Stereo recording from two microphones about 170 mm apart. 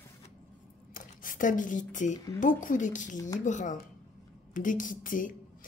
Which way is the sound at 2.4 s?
50° left (ahead or behind).